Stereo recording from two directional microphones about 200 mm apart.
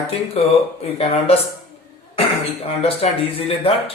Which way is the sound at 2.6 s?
30° left (ahead or behind).